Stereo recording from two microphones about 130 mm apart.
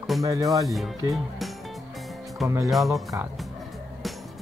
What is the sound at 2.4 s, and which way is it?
Speech, 25° right (ahead or behind).